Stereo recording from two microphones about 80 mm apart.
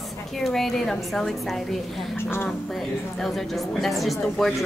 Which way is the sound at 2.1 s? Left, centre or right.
Left.